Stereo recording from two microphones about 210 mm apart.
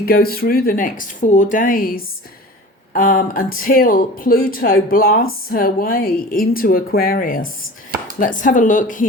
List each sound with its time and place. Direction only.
0.0 s speech: 45° left (ahead or behind)